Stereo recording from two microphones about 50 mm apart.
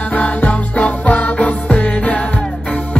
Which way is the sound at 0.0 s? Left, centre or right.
Left.